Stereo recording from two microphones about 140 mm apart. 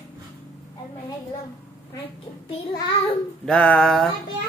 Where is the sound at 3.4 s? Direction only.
5° left (ahead or behind).